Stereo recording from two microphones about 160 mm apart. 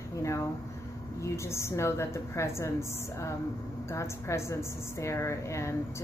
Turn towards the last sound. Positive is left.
turn(degrees=15)  # may be behind; listen again after turning